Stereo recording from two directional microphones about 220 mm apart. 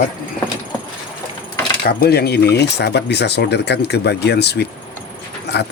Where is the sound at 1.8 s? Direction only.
45° left (ahead or behind).